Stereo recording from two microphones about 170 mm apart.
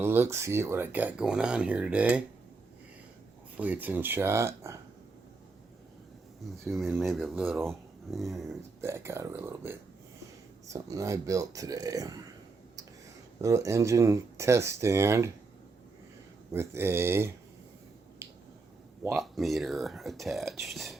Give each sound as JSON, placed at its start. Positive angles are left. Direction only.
{"t": 0.0, "sound": "speech", "side_deg": -15}
{"t": 3.6, "sound": "speech", "side_deg": -10}
{"t": 6.7, "sound": "speech", "side_deg": 0}
{"t": 8.8, "sound": "speech", "side_deg": -15}
{"t": 13.4, "sound": "speech", "side_deg": -20}
{"t": 16.5, "sound": "speech", "side_deg": -15}
{"t": 18.2, "sound": "finger snapping", "side_deg": -15}
{"t": 19.1, "sound": "speech", "side_deg": 0}